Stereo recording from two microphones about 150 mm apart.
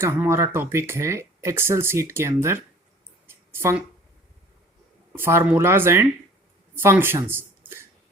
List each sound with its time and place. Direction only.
0.0 s speech: 15° right (ahead or behind)
3.2 s a sound: 15° right (ahead or behind)
5.1 s speech: 15° right (ahead or behind)